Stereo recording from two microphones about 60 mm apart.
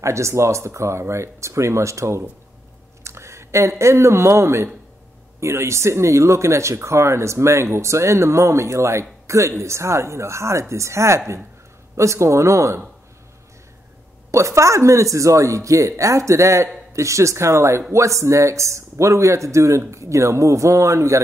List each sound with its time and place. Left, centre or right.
0.0 s speech: right
14.3 s speech: right